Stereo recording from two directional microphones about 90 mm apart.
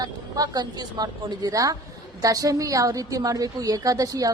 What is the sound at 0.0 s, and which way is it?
A woman's voice, 45° right (ahead or behind).